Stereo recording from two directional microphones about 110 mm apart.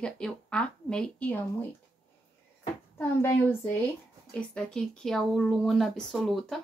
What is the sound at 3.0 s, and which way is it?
Speech, 20° left (ahead or behind).